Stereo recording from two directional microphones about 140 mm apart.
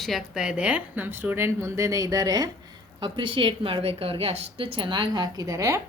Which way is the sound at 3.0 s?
35° right (ahead or behind).